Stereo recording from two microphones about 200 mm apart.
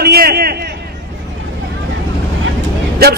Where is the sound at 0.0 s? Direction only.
50° right (ahead or behind).